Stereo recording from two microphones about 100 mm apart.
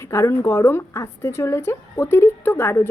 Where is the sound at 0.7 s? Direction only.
20° left (ahead or behind).